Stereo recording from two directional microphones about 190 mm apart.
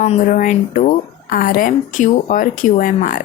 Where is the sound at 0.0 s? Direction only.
35° left (ahead or behind).